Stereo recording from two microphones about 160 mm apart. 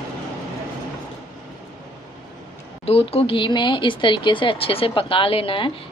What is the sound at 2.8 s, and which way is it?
Speech, 35° left (ahead or behind).